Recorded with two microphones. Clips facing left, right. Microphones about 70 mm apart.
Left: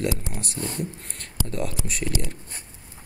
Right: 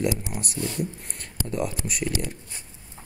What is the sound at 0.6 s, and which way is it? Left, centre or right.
Speech, left.